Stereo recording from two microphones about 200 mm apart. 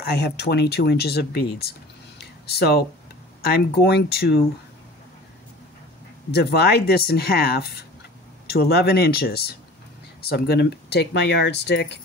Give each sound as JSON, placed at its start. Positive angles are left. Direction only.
{"t": 0.0, "sound": "speech", "side_deg": 55}
{"t": 2.1, "sound": "a sound", "side_deg": 55}
{"t": 3.4, "sound": "speech", "side_deg": 55}
{"t": 6.3, "sound": "speech", "side_deg": 55}